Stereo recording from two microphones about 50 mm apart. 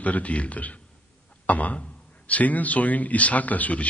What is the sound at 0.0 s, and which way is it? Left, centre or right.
A man's voice, left.